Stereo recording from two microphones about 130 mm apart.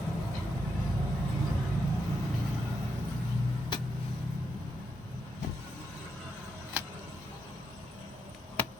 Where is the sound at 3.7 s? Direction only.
35° left (ahead or behind).